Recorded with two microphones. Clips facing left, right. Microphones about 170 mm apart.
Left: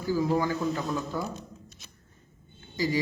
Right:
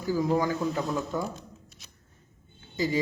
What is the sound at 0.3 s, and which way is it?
Speech, 20° right (ahead or behind).